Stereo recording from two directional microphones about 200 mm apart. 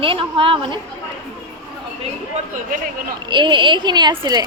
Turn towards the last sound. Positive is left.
turn(degrees=-20)  # may be behind; listen again after turning